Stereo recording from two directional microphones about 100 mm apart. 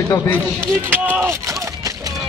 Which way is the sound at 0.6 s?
20° right (ahead or behind).